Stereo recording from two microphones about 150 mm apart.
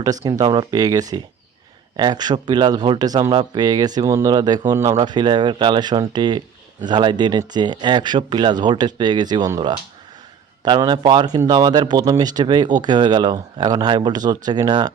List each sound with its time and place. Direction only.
0.0 s speech: 25° right (ahead or behind)